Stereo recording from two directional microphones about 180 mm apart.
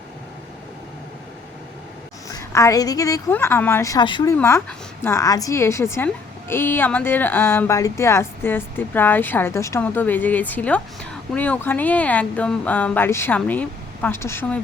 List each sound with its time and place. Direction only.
2.3 s a woman's voice: 15° left (ahead or behind)